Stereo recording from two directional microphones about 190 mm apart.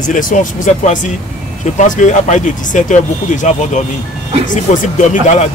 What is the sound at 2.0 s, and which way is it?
Speech, 40° left (ahead or behind).